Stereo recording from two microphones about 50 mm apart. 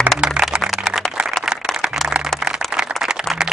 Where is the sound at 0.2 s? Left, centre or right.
Centre.